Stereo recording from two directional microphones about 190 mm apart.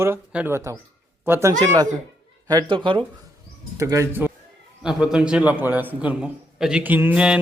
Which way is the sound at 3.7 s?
15° right (ahead or behind).